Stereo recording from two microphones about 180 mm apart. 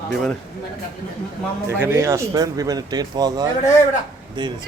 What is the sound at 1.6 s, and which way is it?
Speech, 15° right (ahead or behind).